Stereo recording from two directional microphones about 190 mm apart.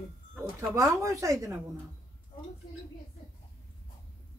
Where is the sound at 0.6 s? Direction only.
15° right (ahead or behind).